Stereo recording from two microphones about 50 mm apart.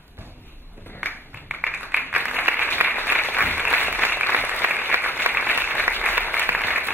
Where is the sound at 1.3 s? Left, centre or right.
Right.